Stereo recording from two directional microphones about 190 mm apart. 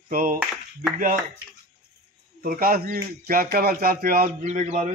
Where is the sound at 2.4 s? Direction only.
50° right (ahead or behind).